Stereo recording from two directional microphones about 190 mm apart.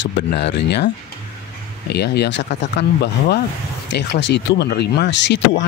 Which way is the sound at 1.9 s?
60° left (ahead or behind).